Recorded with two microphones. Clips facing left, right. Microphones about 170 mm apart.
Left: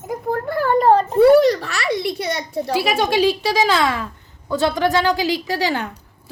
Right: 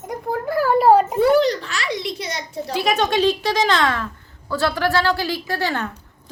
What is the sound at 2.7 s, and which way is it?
A woman's voice, 5° left (ahead or behind).